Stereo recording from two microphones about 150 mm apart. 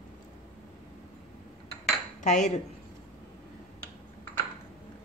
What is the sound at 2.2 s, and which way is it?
Speech, 50° left (ahead or behind).